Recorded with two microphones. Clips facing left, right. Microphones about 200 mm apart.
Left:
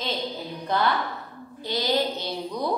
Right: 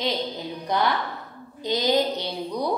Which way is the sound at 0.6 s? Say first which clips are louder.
Even; 15° right (ahead or behind).